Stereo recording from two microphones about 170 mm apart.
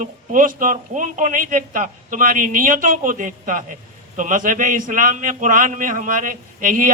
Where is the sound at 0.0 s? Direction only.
50° right (ahead or behind).